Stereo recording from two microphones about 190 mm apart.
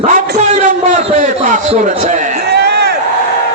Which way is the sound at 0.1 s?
40° right (ahead or behind).